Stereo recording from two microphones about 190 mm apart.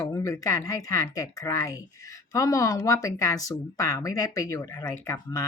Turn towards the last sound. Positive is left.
turn(degrees=15)  # may be behind; listen again after turning